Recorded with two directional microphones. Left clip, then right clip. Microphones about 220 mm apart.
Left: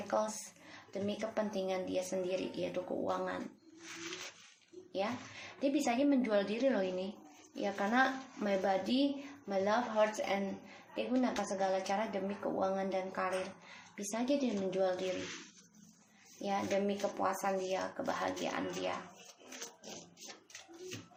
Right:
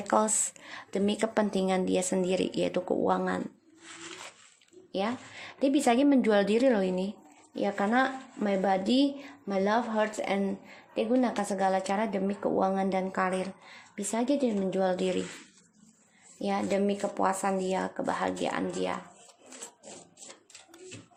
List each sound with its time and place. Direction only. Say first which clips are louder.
0.1 s speech: right 9 dB; 55° right (ahead or behind)
5.5 s speech: right 8 dB; 45° right (ahead or behind)
16.4 s speech: right 5 dB; 45° right (ahead or behind)